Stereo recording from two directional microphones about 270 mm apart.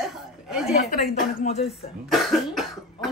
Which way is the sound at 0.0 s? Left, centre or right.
Centre.